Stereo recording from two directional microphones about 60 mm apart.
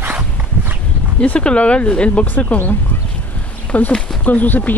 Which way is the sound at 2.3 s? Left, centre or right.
Left.